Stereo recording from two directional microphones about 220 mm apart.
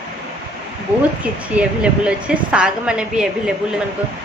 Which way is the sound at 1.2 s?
5° right (ahead or behind).